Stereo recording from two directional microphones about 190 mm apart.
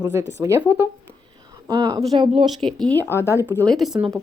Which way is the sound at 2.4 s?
Centre (ahead or behind).